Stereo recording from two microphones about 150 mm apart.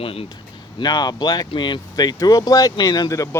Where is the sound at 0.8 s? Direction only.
25° left (ahead or behind).